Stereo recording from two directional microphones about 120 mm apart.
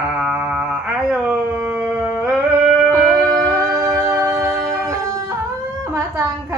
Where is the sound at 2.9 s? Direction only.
25° right (ahead or behind).